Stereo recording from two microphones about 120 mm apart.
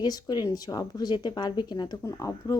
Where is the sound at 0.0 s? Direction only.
35° left (ahead or behind).